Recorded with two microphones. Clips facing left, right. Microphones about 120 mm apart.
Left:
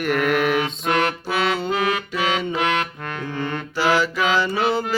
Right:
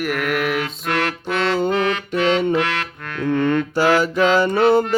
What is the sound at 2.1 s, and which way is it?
Music, 60° right (ahead or behind).